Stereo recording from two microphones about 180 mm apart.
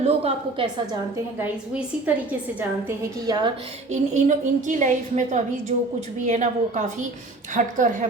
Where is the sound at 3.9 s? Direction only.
40° right (ahead or behind).